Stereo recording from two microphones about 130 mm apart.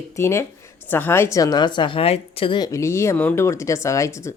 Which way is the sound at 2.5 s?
25° left (ahead or behind).